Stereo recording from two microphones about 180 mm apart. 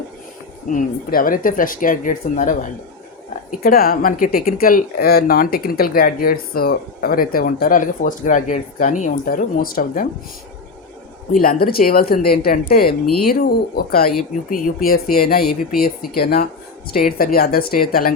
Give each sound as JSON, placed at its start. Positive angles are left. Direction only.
{"t": 0.7, "sound": "speech", "side_deg": 50}
{"t": 11.3, "sound": "speech", "side_deg": 55}